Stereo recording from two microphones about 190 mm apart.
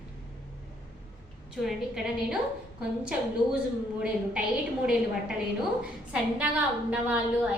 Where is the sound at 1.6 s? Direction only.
Centre (ahead or behind).